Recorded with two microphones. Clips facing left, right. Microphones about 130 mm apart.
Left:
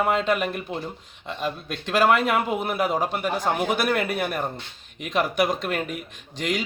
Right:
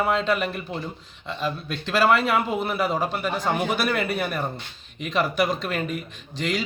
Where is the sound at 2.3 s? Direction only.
5° left (ahead or behind).